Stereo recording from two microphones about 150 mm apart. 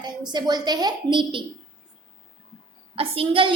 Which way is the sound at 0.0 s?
30° right (ahead or behind).